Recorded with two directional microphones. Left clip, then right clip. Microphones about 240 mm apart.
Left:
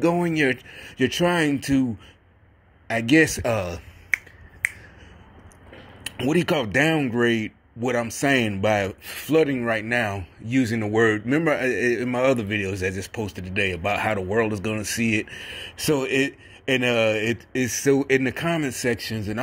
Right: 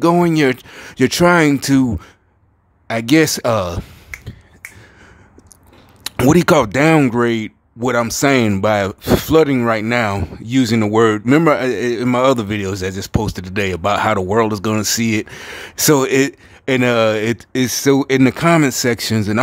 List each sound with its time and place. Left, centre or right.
0.2 s a man's voice: right
2.9 s speech: right
6.1 s a man's voice: right